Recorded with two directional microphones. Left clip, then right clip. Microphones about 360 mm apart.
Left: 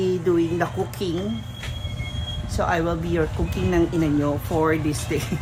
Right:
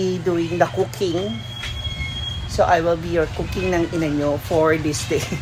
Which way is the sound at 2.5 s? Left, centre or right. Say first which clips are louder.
Right 6 dB; centre.